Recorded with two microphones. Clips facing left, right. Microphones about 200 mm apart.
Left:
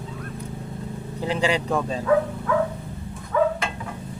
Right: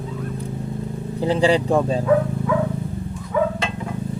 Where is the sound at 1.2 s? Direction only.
35° right (ahead or behind).